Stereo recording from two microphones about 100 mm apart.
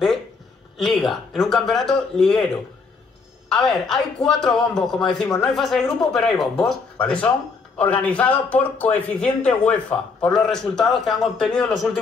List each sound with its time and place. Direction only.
0.7 s a man's voice: centre (ahead or behind)
3.4 s a man's voice: 5° left (ahead or behind)